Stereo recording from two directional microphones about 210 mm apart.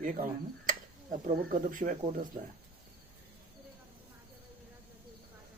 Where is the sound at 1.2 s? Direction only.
35° right (ahead or behind).